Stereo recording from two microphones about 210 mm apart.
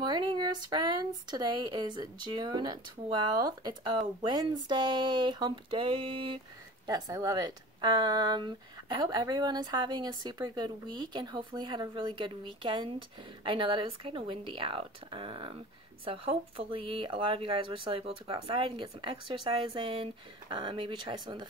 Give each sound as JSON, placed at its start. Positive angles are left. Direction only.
{"t": 0.0, "sound": "speech", "side_deg": -20}